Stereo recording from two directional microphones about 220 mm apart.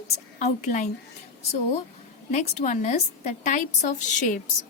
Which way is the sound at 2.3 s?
30° left (ahead or behind).